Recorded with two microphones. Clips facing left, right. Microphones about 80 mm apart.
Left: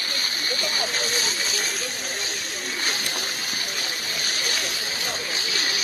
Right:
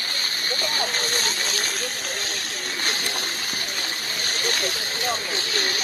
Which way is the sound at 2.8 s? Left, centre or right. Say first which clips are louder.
Right 1 dB; right.